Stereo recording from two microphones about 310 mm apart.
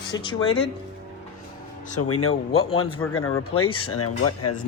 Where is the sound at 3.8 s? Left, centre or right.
Left.